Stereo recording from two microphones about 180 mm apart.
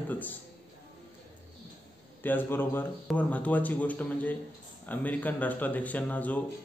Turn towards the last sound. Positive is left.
turn(degrees=10)  # may be behind; listen again after turning